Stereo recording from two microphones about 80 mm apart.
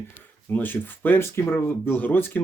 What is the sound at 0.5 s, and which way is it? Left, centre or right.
Speech, left.